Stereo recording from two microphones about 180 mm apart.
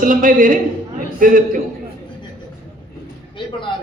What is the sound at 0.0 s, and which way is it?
Speech, 50° right (ahead or behind).